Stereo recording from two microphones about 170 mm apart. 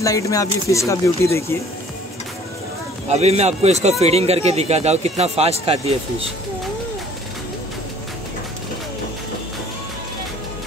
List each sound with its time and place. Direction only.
0.0 s speech: 20° left (ahead or behind)
3.1 s speech: 40° right (ahead or behind)